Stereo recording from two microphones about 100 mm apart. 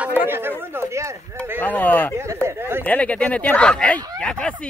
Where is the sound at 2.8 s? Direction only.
15° left (ahead or behind).